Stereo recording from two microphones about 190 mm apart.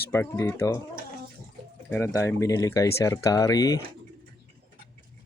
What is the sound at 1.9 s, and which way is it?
Speech, 15° left (ahead or behind).